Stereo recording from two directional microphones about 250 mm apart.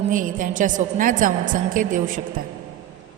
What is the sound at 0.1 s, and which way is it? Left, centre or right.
A woman's voice, right.